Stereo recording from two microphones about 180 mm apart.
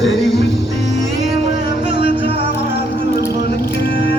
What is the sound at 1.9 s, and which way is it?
Music, 25° right (ahead or behind).